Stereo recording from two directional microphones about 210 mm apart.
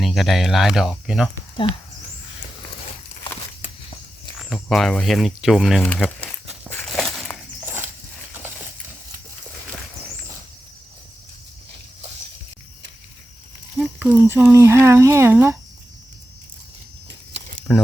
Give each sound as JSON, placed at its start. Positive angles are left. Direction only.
{"t": 0.0, "sound": "speech", "side_deg": 0}
{"t": 1.6, "sound": "speech", "side_deg": 25}
{"t": 4.4, "sound": "speech", "side_deg": 0}
{"t": 6.1, "sound": "a sound", "side_deg": 5}
{"t": 13.7, "sound": "a sound", "side_deg": -5}
{"t": 14.3, "sound": "speech", "side_deg": -10}
{"t": 17.7, "sound": "speech", "side_deg": 0}